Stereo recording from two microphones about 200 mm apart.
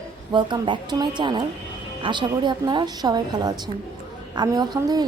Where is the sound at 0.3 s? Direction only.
25° right (ahead or behind).